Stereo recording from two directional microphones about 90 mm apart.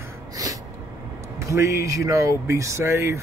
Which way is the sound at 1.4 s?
35° right (ahead or behind).